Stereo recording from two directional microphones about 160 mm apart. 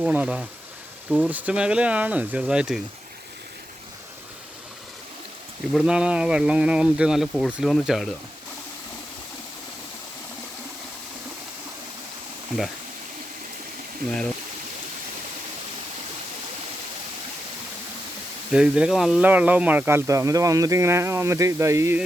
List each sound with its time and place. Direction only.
0.0 s speech: 10° right (ahead or behind)
5.7 s speech: 5° right (ahead or behind)
18.5 s speech: 5° right (ahead or behind)